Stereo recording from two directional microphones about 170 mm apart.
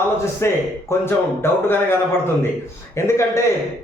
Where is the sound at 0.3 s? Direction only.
15° left (ahead or behind).